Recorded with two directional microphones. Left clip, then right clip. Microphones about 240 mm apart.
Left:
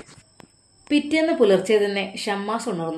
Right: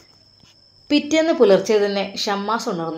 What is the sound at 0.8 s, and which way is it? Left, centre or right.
Speech, centre.